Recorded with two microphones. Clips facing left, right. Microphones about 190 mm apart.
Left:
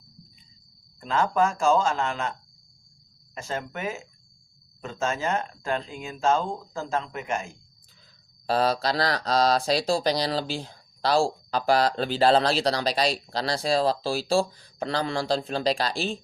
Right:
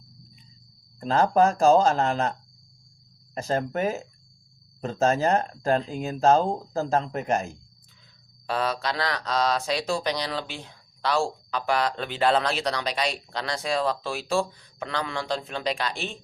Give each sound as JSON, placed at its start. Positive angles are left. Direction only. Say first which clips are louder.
{"t": 0.9, "sound": "speech", "louder": "right 3 dB", "side_deg": -40}
{"t": 3.3, "sound": "speech", "louder": "right 6 dB", "side_deg": -40}
{"t": 8.4, "sound": "speech", "louder": "left 4 dB", "side_deg": 35}